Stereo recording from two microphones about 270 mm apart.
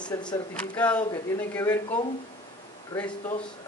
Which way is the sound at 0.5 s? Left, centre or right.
Centre.